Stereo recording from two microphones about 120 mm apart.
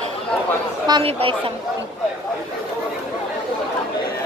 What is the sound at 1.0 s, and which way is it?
Speech, 50° right (ahead or behind).